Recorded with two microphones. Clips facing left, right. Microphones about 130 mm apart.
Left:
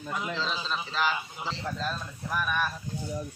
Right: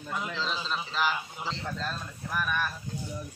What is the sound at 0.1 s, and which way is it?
A man's voice, centre (ahead or behind).